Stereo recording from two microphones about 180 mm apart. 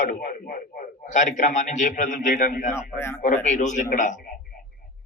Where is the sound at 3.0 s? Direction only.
15° left (ahead or behind).